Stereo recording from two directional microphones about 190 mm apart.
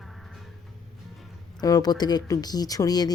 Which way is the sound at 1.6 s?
20° left (ahead or behind).